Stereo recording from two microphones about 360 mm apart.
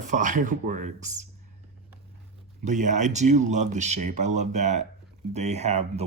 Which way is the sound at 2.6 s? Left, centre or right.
Right.